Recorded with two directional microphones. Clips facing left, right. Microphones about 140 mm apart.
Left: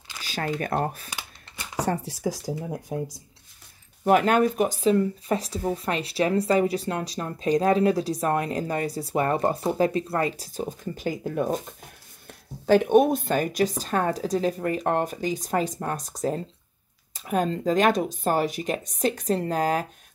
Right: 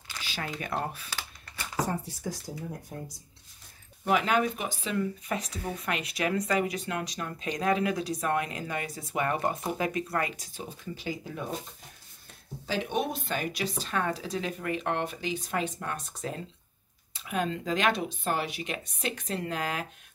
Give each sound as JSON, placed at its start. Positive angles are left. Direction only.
{"t": 0.2, "sound": "speech", "side_deg": 45}
{"t": 1.9, "sound": "speech", "side_deg": 90}
{"t": 4.0, "sound": "speech", "side_deg": 50}
{"t": 12.6, "sound": "speech", "side_deg": 55}